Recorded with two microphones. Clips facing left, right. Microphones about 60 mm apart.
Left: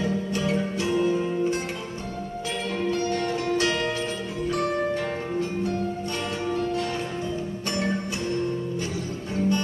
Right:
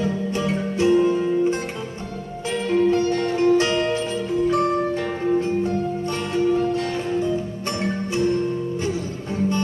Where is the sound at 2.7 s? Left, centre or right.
Right.